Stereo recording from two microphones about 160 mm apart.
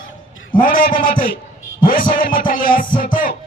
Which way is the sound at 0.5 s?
60° left (ahead or behind).